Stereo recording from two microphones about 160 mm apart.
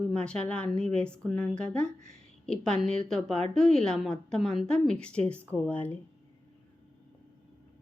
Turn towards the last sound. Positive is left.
turn(degrees=10)  # may be behind; listen again after turning